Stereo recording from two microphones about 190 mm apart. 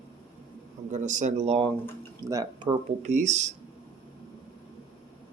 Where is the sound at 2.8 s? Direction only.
40° right (ahead or behind).